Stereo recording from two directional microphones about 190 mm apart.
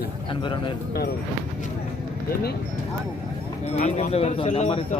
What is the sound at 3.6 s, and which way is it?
Speech, 35° left (ahead or behind).